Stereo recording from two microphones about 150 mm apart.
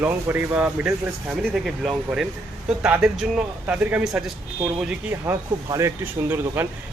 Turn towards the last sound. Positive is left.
turn(degrees=-15)  # may be behind; listen again after turning